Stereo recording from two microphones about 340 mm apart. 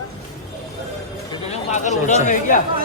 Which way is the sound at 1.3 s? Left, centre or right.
Left.